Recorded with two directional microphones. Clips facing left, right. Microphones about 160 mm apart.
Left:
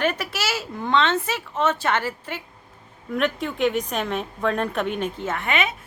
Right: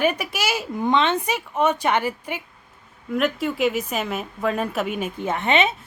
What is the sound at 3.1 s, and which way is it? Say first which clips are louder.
A woman's voice: right 2 dB; 5° right (ahead or behind).